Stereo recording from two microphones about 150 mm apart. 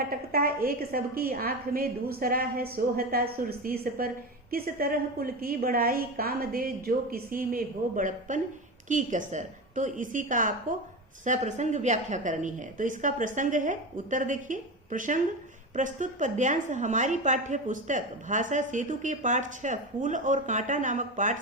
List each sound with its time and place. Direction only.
0.3 s a woman's voice: 75° right (ahead or behind); by 21.3 s 55° right (ahead or behind)